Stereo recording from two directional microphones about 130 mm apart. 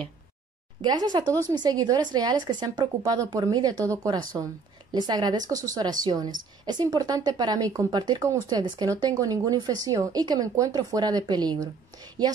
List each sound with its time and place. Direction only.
0.8 s a woman's voice: 35° right (ahead or behind)